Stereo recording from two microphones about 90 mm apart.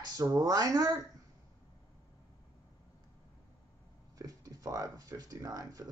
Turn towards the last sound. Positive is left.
turn(degrees=-40)  # may be behind; listen again after turning